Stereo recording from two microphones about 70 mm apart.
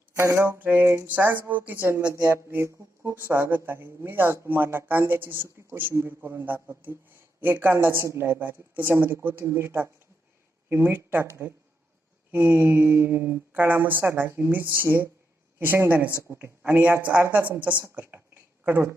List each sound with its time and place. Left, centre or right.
0.2 s speech: right
0.6 s speech: right
18.7 s speech: right